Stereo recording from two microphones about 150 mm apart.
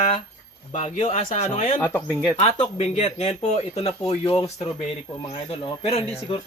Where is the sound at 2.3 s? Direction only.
45° left (ahead or behind).